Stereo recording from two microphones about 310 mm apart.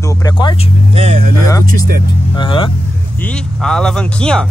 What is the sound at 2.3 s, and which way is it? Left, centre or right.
Speech, centre.